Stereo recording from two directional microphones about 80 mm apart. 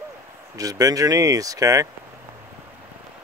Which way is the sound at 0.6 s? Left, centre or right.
Right.